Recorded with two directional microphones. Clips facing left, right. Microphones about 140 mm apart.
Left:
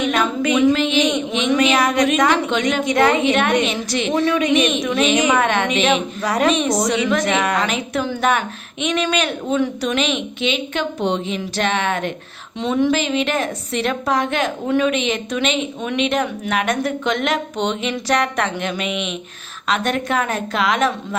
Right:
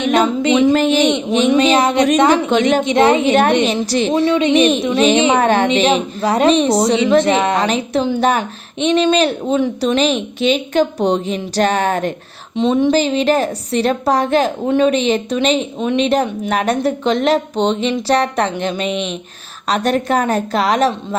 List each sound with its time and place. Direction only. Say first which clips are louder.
0.0 s a sound: right 4 dB; 25° right (ahead or behind)
0.7 s speech: right 4 dB; 40° right (ahead or behind)
1.5 s a woman's voice: right 3 dB; 30° right (ahead or behind)
12.5 s a woman's voice: right 4 dB; 20° right (ahead or behind)
12.9 s speech: right 5 dB; 35° right (ahead or behind)